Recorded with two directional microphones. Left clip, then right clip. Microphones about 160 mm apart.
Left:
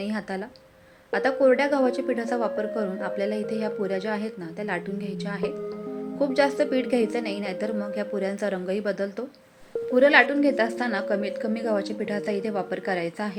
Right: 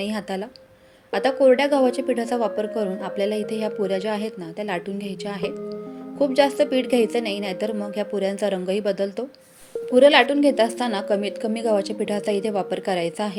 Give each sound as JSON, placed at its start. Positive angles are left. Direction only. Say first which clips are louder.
{"t": 0.0, "sound": "a woman's voice", "louder": "right 3 dB", "side_deg": -35}
{"t": 6.1, "sound": "a woman's voice", "louder": "right 4 dB", "side_deg": -30}